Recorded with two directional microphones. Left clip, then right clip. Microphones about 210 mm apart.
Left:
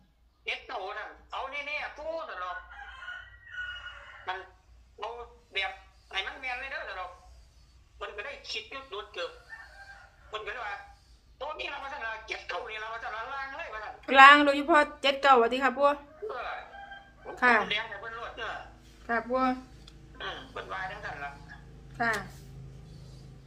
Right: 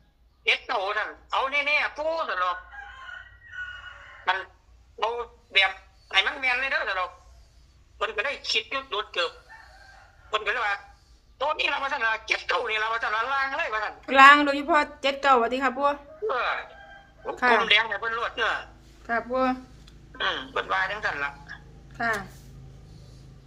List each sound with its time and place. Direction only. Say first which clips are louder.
0.4 s a sound: right 11 dB; 50° right (ahead or behind)
4.3 s a man's voice: right 11 dB; 50° right (ahead or behind)
4.9 s a sound: right 11 dB; 50° right (ahead or behind)
7.9 s a man's voice: right 11 dB; 50° right (ahead or behind)
10.3 s a man's voice: right 11 dB; 50° right (ahead or behind)
14.0 s speech: right 2 dB; 5° right (ahead or behind)
16.2 s a man's voice: right 14 dB; 50° right (ahead or behind)
17.3 s speech: right 2 dB; 5° right (ahead or behind)
17.7 s a man's voice: right 11 dB; 50° right (ahead or behind)
19.0 s speech: right 3 dB; 10° right (ahead or behind)
20.1 s a man's voice: right 11 dB; 50° right (ahead or behind)
21.9 s a woman's voice: right 2 dB; 10° right (ahead or behind)